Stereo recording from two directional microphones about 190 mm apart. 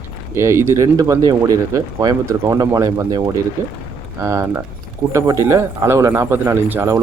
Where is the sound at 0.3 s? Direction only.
15° right (ahead or behind).